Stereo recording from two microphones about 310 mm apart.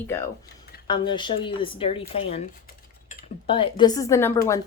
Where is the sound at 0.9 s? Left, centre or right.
Centre.